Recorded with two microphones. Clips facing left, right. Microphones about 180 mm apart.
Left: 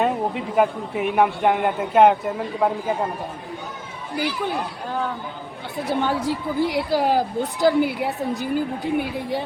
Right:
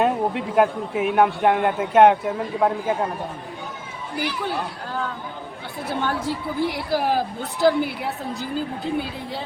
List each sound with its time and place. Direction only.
0.0 s a man's voice: centre (ahead or behind)
4.4 s a woman's voice: 15° left (ahead or behind)